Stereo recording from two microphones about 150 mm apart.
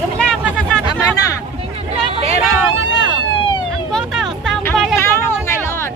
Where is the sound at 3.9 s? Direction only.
Centre (ahead or behind).